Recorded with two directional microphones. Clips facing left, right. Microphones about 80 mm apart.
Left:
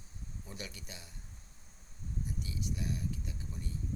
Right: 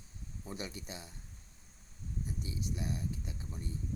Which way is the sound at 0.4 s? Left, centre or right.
Right.